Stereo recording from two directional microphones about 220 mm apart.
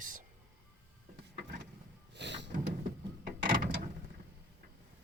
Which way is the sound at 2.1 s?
50° right (ahead or behind).